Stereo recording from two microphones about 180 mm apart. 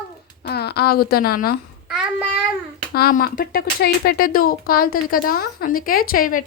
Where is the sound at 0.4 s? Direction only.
65° left (ahead or behind).